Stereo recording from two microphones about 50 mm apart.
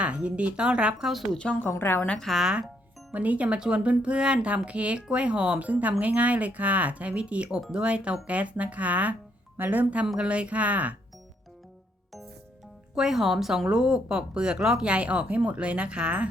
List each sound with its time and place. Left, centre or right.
0.0 s speech: right
0.9 s speech: centre
1.4 s a woman's voice: centre
1.8 s a woman's voice: left
2.1 s speech: centre
2.4 s speech: centre
3.1 s speech: right
5.6 s speech: right
10.2 s speech: right
13.0 s speech: centre
13.7 s speech: centre
14.8 s speech: right